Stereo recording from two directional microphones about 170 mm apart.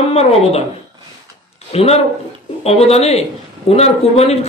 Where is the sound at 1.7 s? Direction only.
35° left (ahead or behind).